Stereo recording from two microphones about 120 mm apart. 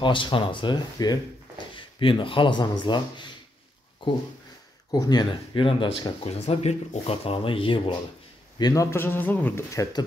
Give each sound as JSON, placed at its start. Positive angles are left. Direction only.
{"t": 0.0, "sound": "speech", "side_deg": 45}
{"t": 2.0, "sound": "speech", "side_deg": 45}
{"t": 4.9, "sound": "speech", "side_deg": 30}
{"t": 8.5, "sound": "a man's voice", "side_deg": 35}
{"t": 8.9, "sound": "speech", "side_deg": 20}
{"t": 9.7, "sound": "speech", "side_deg": 25}